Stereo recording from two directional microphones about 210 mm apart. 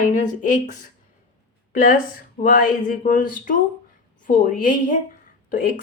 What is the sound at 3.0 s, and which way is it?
Speech, 40° left (ahead or behind).